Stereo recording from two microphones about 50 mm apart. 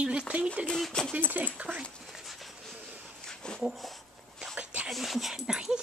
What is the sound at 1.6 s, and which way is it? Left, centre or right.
Speech, right.